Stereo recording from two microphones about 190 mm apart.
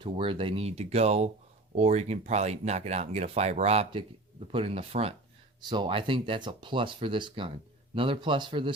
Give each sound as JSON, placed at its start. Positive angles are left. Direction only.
{"t": 0.0, "sound": "speech", "side_deg": -25}